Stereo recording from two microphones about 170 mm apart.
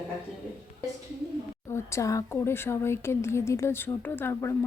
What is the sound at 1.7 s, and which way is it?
Speech, 15° left (ahead or behind).